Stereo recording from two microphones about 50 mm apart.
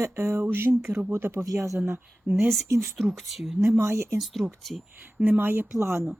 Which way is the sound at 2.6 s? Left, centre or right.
Right.